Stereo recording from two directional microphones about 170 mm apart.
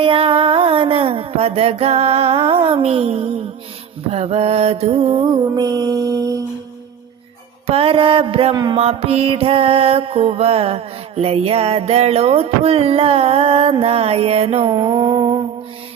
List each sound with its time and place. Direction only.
0.0 s mantra: 30° right (ahead or behind)
7.7 s mantra: 35° right (ahead or behind)